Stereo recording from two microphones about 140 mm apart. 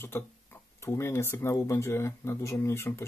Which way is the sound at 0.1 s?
20° left (ahead or behind).